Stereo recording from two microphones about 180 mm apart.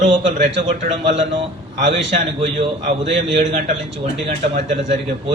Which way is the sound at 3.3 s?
40° right (ahead or behind).